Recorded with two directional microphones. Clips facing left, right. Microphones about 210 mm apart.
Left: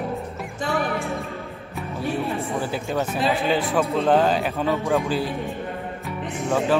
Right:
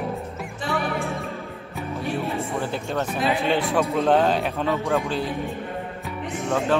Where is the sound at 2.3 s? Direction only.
Centre (ahead or behind).